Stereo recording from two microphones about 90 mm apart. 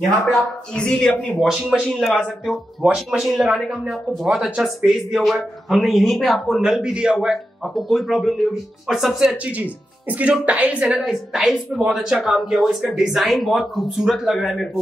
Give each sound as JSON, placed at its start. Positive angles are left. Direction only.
{"t": 0.3, "sound": "speech", "side_deg": 10}
{"t": 1.4, "sound": "a woman's voice", "side_deg": 0}
{"t": 10.9, "sound": "a woman's voice", "side_deg": -5}